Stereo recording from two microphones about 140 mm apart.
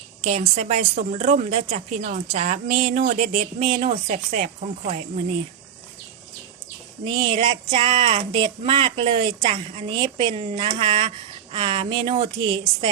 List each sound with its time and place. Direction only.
0.3 s a woman's voice: 50° right (ahead or behind)
7.0 s speech: 35° right (ahead or behind)